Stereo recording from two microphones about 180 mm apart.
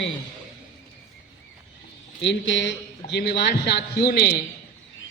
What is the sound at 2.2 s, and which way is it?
A man's voice, 80° left.